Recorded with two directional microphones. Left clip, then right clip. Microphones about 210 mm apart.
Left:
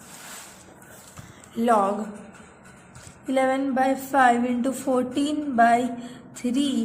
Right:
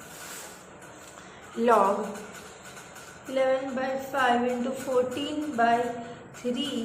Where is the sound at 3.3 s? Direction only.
40° left (ahead or behind).